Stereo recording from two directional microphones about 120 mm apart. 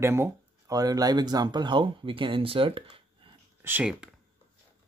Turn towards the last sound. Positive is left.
turn(degrees=-10)  # may be behind; listen again after turning